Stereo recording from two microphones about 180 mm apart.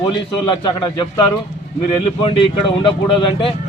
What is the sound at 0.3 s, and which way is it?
Speech, 25° left (ahead or behind).